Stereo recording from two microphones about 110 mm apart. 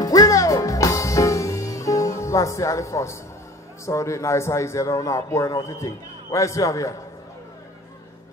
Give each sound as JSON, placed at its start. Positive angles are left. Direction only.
{"t": 0.0, "sound": "music", "side_deg": 35}
{"t": 3.8, "sound": "a man's voice", "side_deg": 25}